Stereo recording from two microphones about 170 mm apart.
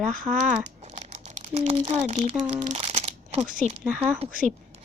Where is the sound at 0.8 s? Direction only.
40° right (ahead or behind).